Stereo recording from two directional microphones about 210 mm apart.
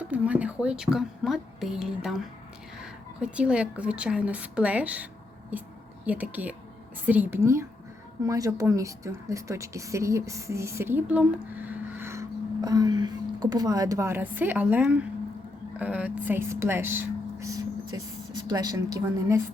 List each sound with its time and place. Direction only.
0.1 s a woman's voice: 5° right (ahead or behind)